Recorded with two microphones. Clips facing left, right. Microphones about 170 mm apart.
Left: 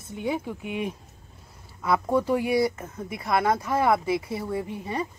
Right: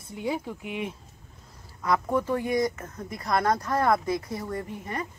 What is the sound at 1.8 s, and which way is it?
Speech, 10° left (ahead or behind).